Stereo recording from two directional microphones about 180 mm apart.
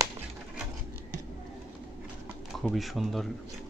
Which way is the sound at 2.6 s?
Centre (ahead or behind).